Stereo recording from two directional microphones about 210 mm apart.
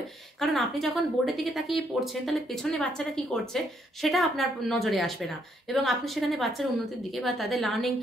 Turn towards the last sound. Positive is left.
turn(degrees=0)  # may be behind; listen again after turning